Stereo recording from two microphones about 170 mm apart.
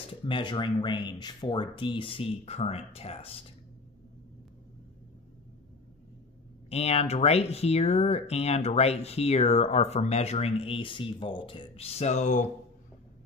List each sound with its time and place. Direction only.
0.1 s speech: 30° left (ahead or behind)
6.7 s speech: 35° left (ahead or behind)